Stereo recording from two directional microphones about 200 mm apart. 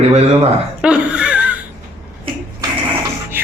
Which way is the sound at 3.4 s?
10° right (ahead or behind).